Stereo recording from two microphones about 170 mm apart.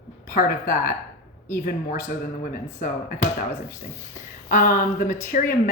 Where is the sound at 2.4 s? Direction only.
55° left (ahead or behind).